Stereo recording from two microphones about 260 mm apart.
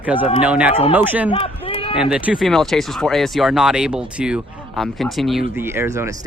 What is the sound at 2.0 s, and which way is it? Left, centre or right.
Speech, centre.